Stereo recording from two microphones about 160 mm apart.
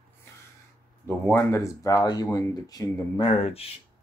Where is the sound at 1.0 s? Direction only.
15° left (ahead or behind); by 3.6 s 40° left (ahead or behind).